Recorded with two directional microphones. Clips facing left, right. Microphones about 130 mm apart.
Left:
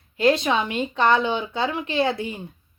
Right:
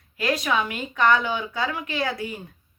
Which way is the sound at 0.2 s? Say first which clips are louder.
Left 4 dB; 25° left (ahead or behind).